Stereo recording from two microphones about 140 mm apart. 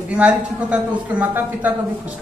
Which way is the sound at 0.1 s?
10° right (ahead or behind).